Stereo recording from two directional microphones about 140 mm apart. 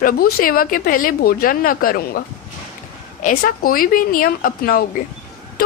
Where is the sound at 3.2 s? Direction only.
80° left.